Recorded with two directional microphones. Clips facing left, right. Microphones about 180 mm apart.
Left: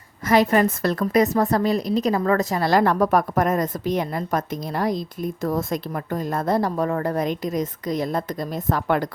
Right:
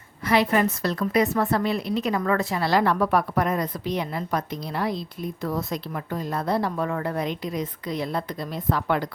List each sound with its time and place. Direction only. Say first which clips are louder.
0.3 s a woman's voice: left 3 dB; 45° left (ahead or behind)